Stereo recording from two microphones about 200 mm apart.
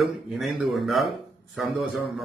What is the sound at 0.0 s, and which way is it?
A man's voice, centre (ahead or behind).